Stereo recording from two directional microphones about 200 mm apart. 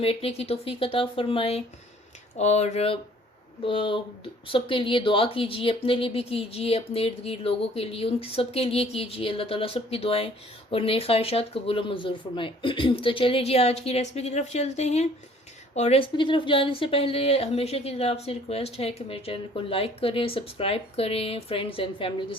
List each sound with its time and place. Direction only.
0.0 s a woman's voice: 30° left (ahead or behind)